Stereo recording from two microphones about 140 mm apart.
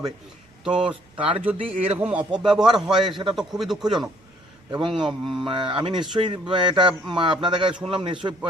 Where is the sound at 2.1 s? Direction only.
5° right (ahead or behind).